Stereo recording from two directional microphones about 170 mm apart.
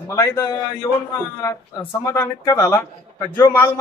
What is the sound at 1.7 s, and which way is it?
Speech, 15° left (ahead or behind).